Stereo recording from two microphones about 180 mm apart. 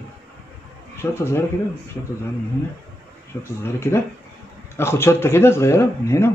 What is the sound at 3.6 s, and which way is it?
Speech, 15° left (ahead or behind).